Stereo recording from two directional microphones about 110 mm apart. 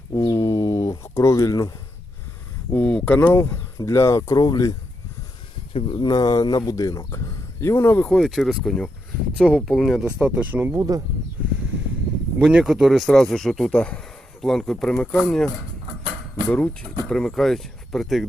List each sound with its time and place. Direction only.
0.1 s bird: 35° left (ahead or behind)
2.7 s speech: 10° left (ahead or behind)
4.4 s speech: 40° left (ahead or behind)
5.7 s speech: 45° left (ahead or behind); by 8.0 s 20° left (ahead or behind)
8.0 s speech: 5° left (ahead or behind); by 10.8 s 15° right (ahead or behind)
10.8 s speech: 30° right (ahead or behind)
12.4 s speech: 5° right (ahead or behind)